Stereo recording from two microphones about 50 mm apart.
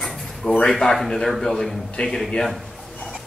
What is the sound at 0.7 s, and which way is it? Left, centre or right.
Speech, centre.